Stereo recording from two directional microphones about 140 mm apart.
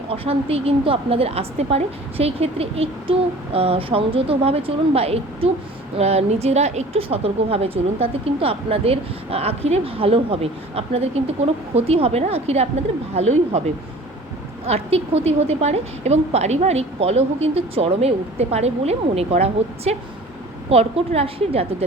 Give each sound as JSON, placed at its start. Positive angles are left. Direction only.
{"t": 0.1, "sound": "a woman's voice", "side_deg": -45}
{"t": 14.7, "sound": "a woman's voice", "side_deg": -45}